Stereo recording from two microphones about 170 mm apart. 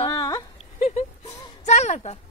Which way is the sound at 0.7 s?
40° left (ahead or behind).